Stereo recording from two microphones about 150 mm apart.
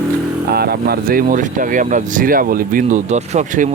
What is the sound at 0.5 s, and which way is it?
Speech, 90° right.